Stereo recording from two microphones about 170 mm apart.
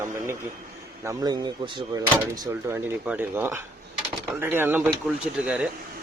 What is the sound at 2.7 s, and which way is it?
Speech, 10° right (ahead or behind).